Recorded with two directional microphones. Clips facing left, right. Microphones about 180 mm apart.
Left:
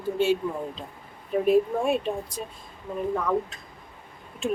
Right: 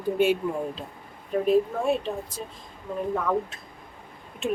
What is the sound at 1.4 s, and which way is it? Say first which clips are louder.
Speech: left 1 dB; 15° left (ahead or behind).